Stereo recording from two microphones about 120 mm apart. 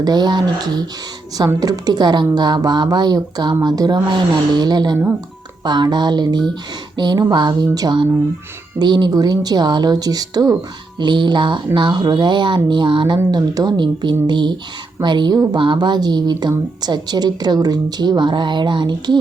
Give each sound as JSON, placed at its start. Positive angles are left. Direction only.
{"t": 0.0, "sound": "speech", "side_deg": -35}